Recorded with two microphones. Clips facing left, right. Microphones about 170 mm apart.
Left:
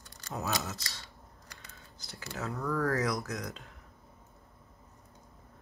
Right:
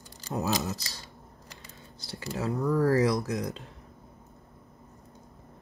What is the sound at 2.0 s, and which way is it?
Speech, 30° right (ahead or behind).